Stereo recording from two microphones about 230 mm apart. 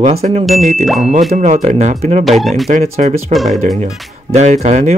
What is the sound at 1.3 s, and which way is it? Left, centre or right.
Speech, right.